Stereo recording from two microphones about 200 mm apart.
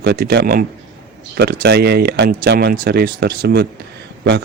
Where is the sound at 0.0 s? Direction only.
55° right (ahead or behind).